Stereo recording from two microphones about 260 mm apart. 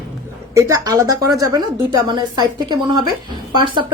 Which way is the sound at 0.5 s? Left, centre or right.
Centre.